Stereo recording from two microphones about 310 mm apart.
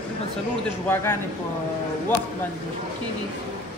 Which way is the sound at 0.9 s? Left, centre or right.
Centre.